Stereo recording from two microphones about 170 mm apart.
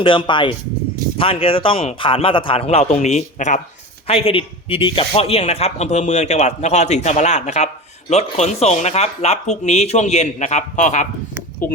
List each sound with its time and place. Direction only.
0.0 s speech: 30° left (ahead or behind); by 3.6 s 45° left (ahead or behind)
4.0 s speech: 35° left (ahead or behind)